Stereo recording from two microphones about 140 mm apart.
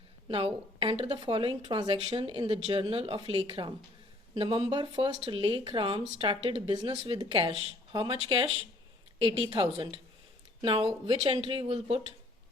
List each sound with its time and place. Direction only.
0.3 s a woman's voice: 40° right (ahead or behind)